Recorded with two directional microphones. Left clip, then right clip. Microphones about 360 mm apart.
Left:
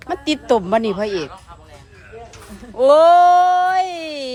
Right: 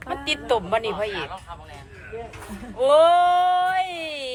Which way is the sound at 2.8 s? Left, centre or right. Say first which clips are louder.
Left 6 dB; left.